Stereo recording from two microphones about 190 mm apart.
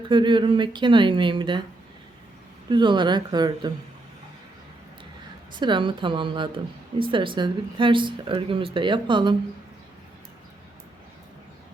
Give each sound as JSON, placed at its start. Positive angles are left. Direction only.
{"t": 0.1, "sound": "speech", "side_deg": -25}
{"t": 2.6, "sound": "speech", "side_deg": -25}
{"t": 5.5, "sound": "speech", "side_deg": -25}